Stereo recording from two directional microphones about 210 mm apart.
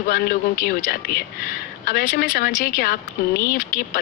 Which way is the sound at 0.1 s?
45° left (ahead or behind).